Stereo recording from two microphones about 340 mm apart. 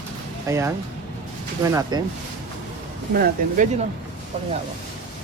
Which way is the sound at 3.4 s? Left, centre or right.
Right.